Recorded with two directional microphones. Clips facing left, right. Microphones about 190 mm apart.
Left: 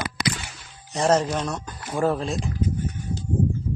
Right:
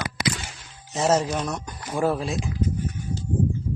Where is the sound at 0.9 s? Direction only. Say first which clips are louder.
Left 1 dB; 5° right (ahead or behind).